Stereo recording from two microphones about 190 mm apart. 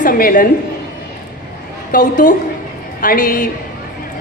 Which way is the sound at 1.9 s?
45° left (ahead or behind).